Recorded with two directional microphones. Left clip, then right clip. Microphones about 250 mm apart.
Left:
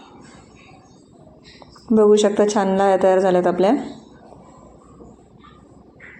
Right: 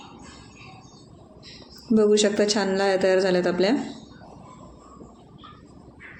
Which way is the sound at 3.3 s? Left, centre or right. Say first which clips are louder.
Left 5 dB; centre.